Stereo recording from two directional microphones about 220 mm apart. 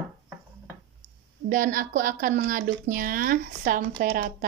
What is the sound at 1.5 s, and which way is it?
Speech, 35° right (ahead or behind).